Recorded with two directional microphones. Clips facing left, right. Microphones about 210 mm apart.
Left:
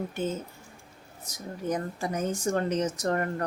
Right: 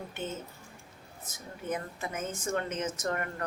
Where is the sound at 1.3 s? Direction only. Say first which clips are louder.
Left 5 dB; 40° left (ahead or behind).